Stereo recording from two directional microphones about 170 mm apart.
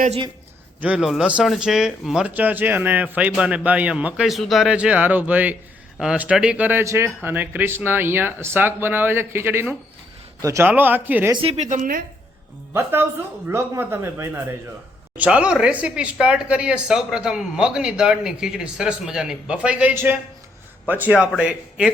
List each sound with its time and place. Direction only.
0.8 s speech: 5° right (ahead or behind)
11.3 s a woman's voice: 30° right (ahead or behind); by 12.0 s 55° right (ahead or behind)
12.7 s speech: 15° right (ahead or behind)